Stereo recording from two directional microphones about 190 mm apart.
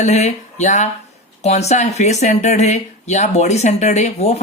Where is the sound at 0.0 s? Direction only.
35° left (ahead or behind).